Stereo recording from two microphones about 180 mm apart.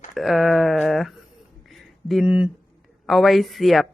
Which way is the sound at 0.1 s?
Centre (ahead or behind).